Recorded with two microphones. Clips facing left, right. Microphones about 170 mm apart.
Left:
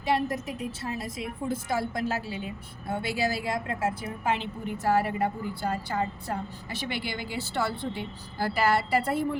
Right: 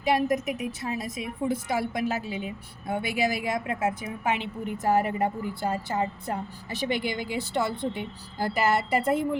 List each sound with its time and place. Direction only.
0.0 s a woman's voice: 20° right (ahead or behind)